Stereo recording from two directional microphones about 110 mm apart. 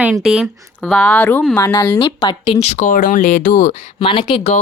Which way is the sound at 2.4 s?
80° left.